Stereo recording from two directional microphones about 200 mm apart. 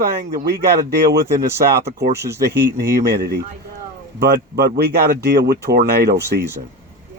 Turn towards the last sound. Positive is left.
turn(degrees=-55)  # may be behind; listen again after turning